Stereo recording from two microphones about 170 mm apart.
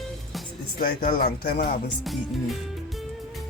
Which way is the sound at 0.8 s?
55° left (ahead or behind).